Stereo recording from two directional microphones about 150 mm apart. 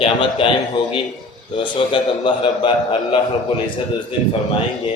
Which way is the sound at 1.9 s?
35° left (ahead or behind).